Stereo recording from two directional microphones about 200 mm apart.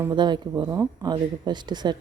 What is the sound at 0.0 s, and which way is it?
Speech, 20° right (ahead or behind).